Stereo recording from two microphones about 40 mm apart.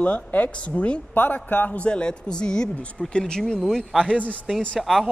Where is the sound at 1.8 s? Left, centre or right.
Left.